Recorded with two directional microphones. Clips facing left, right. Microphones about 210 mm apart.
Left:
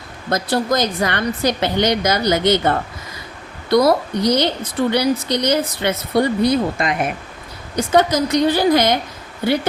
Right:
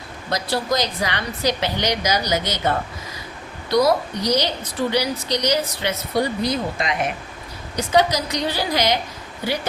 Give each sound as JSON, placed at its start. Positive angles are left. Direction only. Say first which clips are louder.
{"t": 0.3, "sound": "a woman's voice", "louder": "left 4 dB", "side_deg": 50}
{"t": 7.9, "sound": "a woman's voice", "louder": "left 4 dB", "side_deg": 50}